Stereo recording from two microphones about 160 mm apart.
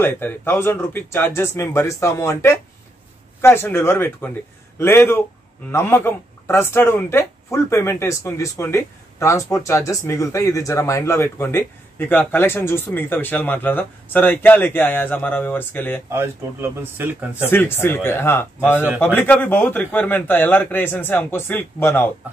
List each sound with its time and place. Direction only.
0.0 s speech: 15° left (ahead or behind)
16.1 s speech: 15° right (ahead or behind)
17.5 s speech: 15° left (ahead or behind)